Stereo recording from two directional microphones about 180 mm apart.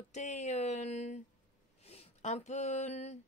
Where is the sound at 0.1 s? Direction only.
40° left (ahead or behind).